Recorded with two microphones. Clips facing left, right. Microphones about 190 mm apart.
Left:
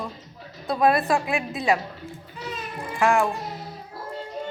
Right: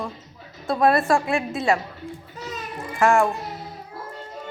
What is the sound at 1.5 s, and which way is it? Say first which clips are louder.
Speech: even; 15° left (ahead or behind).